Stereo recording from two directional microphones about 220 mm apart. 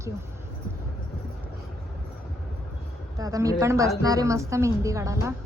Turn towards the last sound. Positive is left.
turn(degrees=-15)  # may be behind; listen again after turning